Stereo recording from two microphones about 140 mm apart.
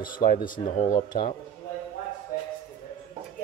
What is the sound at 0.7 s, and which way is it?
Speech, 70° left (ahead or behind).